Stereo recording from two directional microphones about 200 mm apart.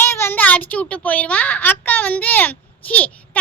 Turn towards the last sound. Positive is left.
turn(degrees=5)  # may be behind; listen again after turning